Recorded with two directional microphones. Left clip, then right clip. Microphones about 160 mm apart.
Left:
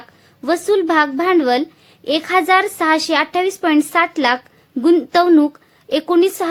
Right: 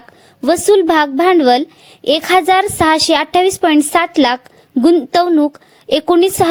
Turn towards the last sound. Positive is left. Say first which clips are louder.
# right 4 dB
turn(degrees=-35)  # may be behind; listen again after turning